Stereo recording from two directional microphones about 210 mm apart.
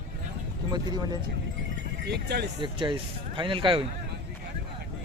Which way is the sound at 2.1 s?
50° right (ahead or behind).